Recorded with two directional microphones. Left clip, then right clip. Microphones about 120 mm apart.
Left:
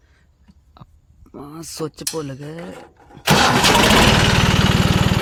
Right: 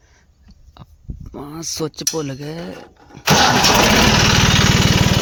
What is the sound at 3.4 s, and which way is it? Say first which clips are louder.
Engine: right 2 dB; 5° left (ahead or behind).